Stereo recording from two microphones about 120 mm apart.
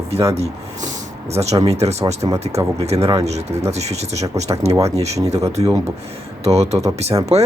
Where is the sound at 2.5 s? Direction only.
60° right (ahead or behind).